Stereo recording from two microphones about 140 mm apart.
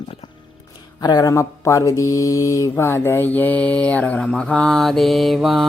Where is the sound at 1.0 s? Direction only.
30° left (ahead or behind); by 5.6 s centre (ahead or behind).